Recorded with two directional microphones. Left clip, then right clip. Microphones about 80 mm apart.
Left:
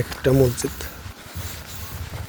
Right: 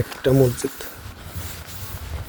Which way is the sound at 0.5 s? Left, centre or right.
Right.